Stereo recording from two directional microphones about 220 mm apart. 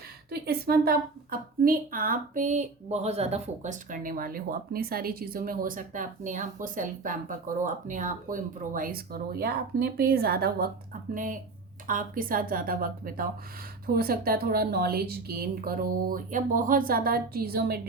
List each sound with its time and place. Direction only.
0.3 s a woman's voice: 45° right (ahead or behind)